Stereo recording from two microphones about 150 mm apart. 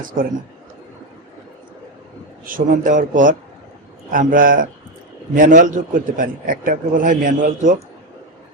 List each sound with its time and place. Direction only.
2.6 s a man's voice: 60° right (ahead or behind)